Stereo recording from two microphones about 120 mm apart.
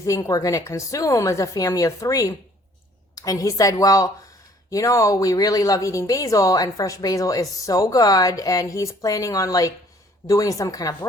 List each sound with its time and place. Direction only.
0.0 s speech: 30° left (ahead or behind)